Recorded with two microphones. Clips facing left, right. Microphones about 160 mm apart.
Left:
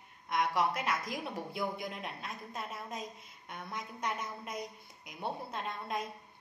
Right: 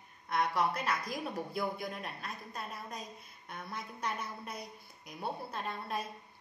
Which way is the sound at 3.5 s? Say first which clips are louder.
Left 1 dB; 20° left (ahead or behind).